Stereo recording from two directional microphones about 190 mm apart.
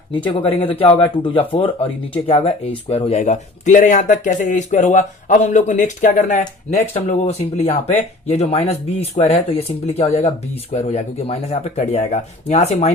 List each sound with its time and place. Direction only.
0.1 s speech: 25° left (ahead or behind)